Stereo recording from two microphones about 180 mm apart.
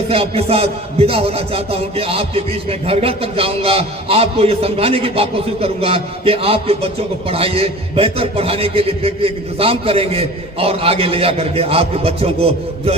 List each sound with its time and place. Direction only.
0.1 s music: 35° right (ahead or behind)